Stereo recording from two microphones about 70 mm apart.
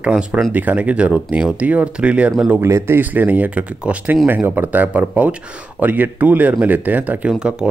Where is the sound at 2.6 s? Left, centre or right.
Right.